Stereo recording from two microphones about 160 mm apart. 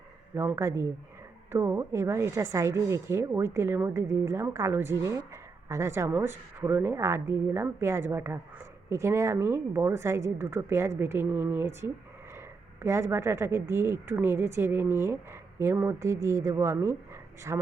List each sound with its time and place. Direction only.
0.3 s speech: 15° right (ahead or behind)